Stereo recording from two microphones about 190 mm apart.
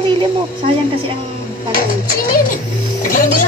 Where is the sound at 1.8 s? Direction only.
50° left (ahead or behind).